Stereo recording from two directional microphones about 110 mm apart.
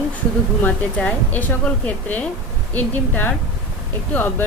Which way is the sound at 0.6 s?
15° left (ahead or behind).